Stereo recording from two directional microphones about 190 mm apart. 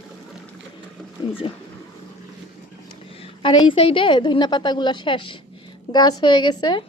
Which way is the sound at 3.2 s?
25° left (ahead or behind).